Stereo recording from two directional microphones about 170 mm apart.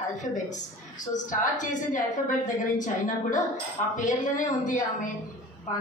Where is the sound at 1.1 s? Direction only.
50° left (ahead or behind).